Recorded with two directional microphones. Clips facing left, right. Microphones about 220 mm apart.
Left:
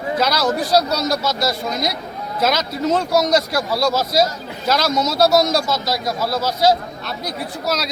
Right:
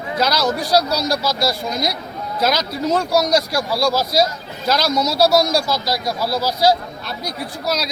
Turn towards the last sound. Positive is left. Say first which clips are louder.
# even
turn(degrees=0)  # may be behind; listen again after turning